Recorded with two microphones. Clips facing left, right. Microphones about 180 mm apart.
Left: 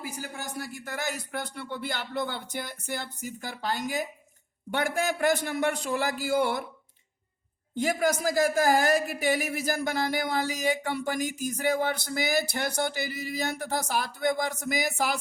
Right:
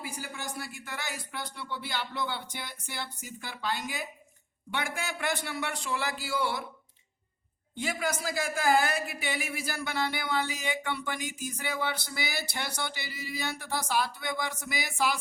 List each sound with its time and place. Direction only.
0.0 s speech: 45° left (ahead or behind)
7.8 s speech: 40° left (ahead or behind)